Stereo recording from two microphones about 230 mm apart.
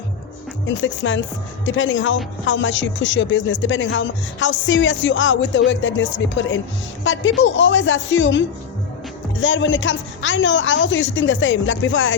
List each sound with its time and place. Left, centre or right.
0.7 s a woman's voice: left